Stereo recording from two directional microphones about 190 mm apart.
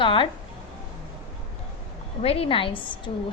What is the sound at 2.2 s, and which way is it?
Speech, 30° left (ahead or behind).